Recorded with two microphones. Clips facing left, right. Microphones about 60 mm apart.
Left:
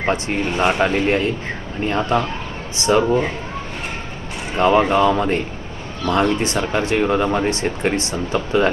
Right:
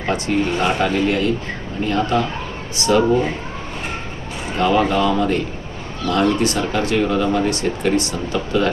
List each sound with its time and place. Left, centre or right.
0.0 s speech: left
4.5 s speech: left